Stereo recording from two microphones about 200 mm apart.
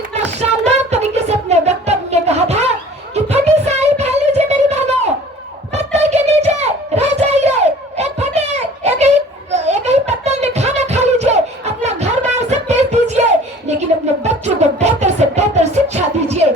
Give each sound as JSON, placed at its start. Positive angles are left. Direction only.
{"t": 0.3, "sound": "music", "side_deg": -35}
{"t": 3.2, "sound": "child singing", "side_deg": -35}
{"t": 5.7, "sound": "a sound", "side_deg": -35}
{"t": 14.3, "sound": "music", "side_deg": -35}